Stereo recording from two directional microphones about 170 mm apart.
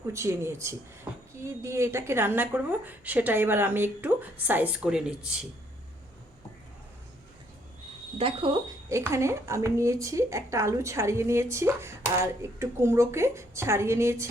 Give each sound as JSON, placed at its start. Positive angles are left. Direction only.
{"t": 0.1, "sound": "a woman's voice", "side_deg": -15}
{"t": 8.2, "sound": "speech", "side_deg": -30}
{"t": 8.9, "sound": "a woman's voice", "side_deg": -15}